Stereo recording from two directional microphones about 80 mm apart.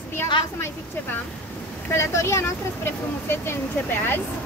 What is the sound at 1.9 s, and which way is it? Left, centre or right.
Speech, left.